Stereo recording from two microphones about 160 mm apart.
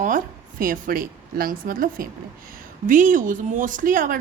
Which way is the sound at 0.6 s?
60° right (ahead or behind).